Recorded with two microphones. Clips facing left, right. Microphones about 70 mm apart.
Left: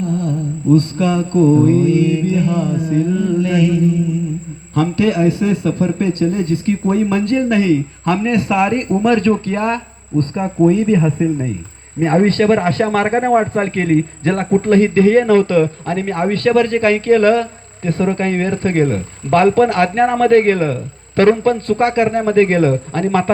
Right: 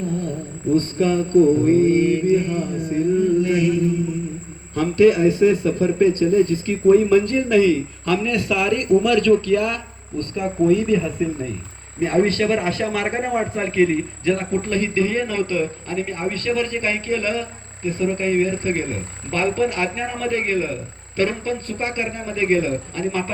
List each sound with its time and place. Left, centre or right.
0.0 s a sound: left
1.4 s music: left
2.1 s speech: left
4.7 s a man's voice: left
14.3 s speech: left